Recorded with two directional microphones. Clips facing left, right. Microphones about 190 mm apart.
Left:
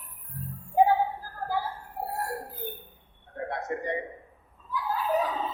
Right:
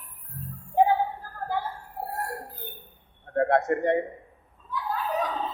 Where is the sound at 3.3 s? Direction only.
65° right (ahead or behind).